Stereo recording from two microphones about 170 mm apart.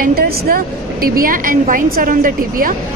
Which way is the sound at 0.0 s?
60° right (ahead or behind).